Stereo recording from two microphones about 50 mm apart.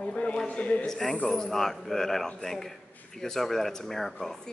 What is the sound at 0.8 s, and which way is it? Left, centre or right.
A man's voice, centre.